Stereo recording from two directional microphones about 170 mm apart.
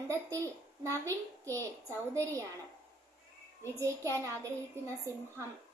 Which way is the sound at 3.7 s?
15° right (ahead or behind).